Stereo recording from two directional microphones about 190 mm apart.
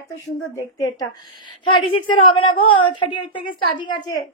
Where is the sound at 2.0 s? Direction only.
25° left (ahead or behind).